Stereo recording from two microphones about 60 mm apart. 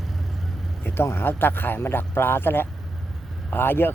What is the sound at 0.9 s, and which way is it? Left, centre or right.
Speech, left.